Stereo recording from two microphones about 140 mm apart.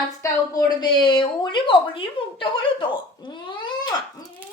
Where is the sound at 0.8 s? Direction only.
35° left (ahead or behind).